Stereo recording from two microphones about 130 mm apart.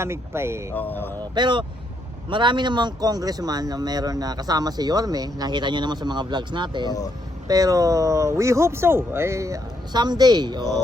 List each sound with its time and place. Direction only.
0.0 s speech: 20° right (ahead or behind)
0.7 s speech: 15° left (ahead or behind)
1.4 s speech: 35° right (ahead or behind)